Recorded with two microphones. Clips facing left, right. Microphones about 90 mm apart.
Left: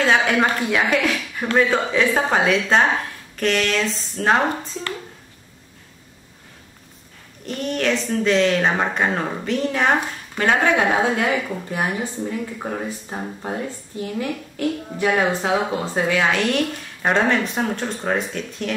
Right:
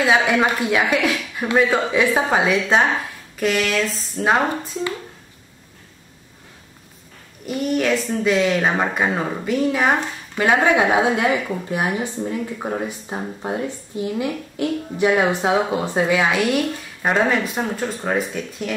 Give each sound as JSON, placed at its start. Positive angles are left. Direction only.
{"t": 0.0, "sound": "speech", "side_deg": -10}
{"t": 7.4, "sound": "speech", "side_deg": -10}